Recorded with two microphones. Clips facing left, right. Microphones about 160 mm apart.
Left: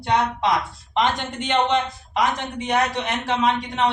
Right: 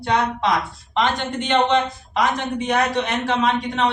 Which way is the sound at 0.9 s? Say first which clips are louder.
Right 1 dB; 10° left (ahead or behind).